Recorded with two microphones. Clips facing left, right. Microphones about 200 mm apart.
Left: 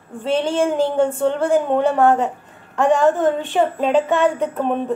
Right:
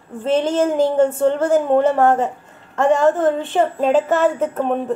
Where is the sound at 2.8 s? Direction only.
15° left (ahead or behind).